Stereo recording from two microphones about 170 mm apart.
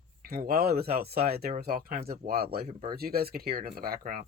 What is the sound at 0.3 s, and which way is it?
Speech, 60° right (ahead or behind).